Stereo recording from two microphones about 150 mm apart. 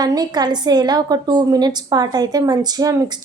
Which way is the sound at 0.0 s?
25° right (ahead or behind).